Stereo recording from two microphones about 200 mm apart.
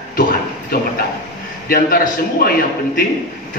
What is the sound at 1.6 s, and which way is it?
Speech, 45° left (ahead or behind).